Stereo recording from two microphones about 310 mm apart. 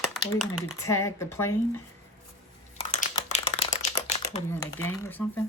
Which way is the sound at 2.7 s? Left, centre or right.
Left.